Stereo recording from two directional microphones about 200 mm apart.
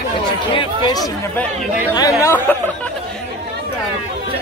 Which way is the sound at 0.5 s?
20° left (ahead or behind).